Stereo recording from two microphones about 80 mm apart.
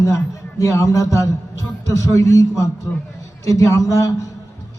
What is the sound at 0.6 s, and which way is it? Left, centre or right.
A man's voice, left.